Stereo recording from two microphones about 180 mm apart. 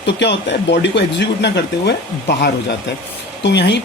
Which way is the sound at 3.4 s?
70° left (ahead or behind).